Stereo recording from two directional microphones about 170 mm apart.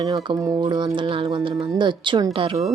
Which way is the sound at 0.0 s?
25° right (ahead or behind).